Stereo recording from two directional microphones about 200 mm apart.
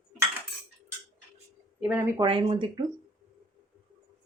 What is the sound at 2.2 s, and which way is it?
Speech, 25° right (ahead or behind).